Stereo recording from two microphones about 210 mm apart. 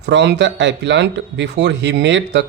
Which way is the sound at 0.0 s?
55° right (ahead or behind).